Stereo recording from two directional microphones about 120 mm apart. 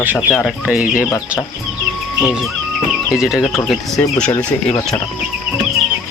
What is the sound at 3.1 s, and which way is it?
Speech, 5° right (ahead or behind).